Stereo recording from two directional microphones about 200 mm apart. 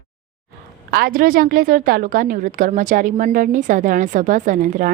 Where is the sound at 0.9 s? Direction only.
50° right (ahead or behind).